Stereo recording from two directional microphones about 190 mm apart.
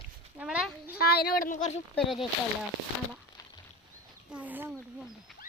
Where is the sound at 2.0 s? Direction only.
Centre (ahead or behind).